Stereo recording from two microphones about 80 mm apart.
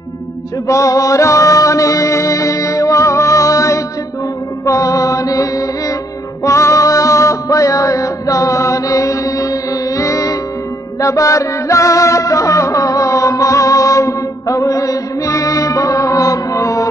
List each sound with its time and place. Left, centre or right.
0.7 s music: left